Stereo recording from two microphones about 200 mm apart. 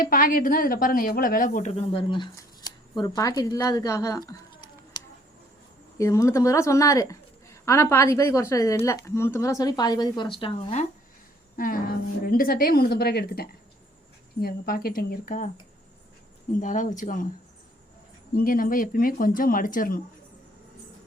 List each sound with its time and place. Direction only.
0.0 s a woman's voice: 45° left (ahead or behind); by 10.8 s 30° left (ahead or behind)
11.5 s a woman's voice: 45° left (ahead or behind)
16.6 s speech: 40° left (ahead or behind)
18.3 s a woman's voice: 45° left (ahead or behind)